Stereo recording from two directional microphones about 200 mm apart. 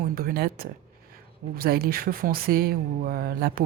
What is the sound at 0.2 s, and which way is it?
Speech, 50° right (ahead or behind).